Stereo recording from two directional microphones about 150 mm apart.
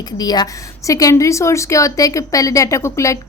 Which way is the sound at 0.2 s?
25° left (ahead or behind).